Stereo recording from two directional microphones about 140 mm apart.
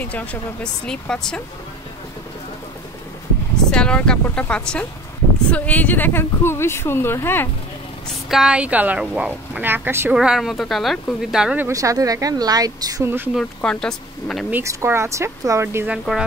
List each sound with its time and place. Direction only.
0.0 s speech: 10° left (ahead or behind)
3.7 s speech: 5° left (ahead or behind)
8.3 s speech: 5° right (ahead or behind)
10.1 s speech: 5° right (ahead or behind)
11.6 s speech: 25° right (ahead or behind)
13.6 s speech: 5° left (ahead or behind)
14.5 s speech: 20° right (ahead or behind)